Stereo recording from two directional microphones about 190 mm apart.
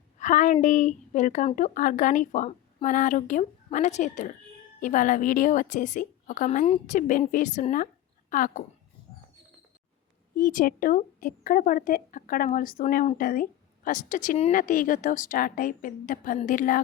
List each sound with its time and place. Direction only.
0.2 s a woman's voice: 40° left (ahead or behind)
10.3 s a woman's voice: 45° left (ahead or behind)